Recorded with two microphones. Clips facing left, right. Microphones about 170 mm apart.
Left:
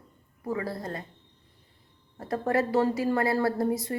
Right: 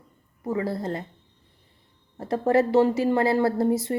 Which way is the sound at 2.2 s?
25° right (ahead or behind).